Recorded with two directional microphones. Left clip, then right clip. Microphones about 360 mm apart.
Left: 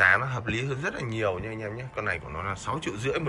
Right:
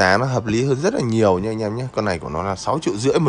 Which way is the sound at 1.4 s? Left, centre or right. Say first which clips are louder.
Right 11 dB; right.